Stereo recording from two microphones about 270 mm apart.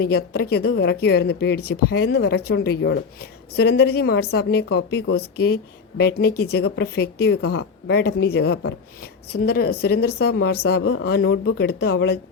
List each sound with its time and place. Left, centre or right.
0.0 s speech: left